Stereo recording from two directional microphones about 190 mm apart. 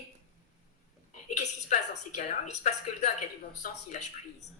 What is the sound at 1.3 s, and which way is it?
Speech, 40° left (ahead or behind).